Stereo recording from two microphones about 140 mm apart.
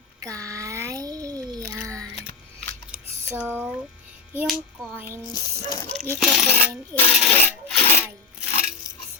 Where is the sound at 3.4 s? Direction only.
15° right (ahead or behind).